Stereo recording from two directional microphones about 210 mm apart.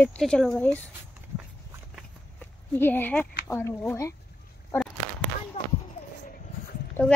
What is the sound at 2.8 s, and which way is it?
Speech, 10° left (ahead or behind).